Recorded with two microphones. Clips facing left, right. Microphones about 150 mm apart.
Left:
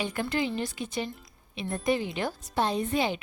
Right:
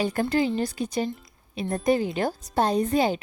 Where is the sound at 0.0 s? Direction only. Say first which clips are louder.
Right 6 dB; 40° right (ahead or behind).